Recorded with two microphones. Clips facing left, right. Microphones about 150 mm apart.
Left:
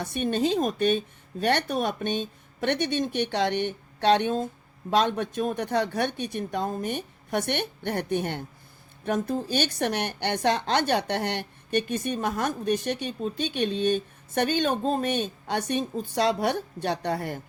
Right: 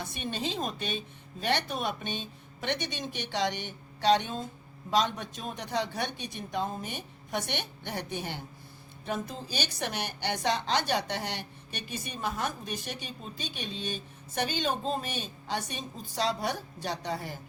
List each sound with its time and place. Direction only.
0.0 s a woman's voice: 50° left (ahead or behind)